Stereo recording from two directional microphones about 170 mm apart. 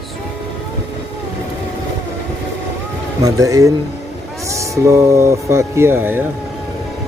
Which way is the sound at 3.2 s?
20° right (ahead or behind).